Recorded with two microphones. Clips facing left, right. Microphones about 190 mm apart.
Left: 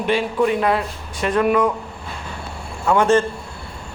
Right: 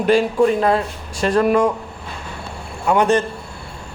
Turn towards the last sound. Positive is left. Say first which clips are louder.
# even
turn(degrees=-15)  # may be behind; listen again after turning